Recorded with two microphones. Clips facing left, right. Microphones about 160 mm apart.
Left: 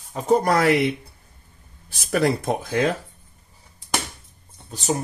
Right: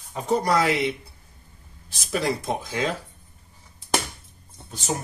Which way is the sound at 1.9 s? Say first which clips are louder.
Left 5 dB; 55° left (ahead or behind).